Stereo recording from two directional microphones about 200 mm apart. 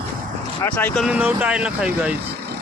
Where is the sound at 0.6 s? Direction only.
10° left (ahead or behind).